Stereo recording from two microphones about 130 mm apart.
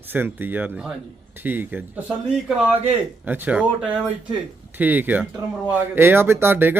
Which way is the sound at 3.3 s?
10° right (ahead or behind).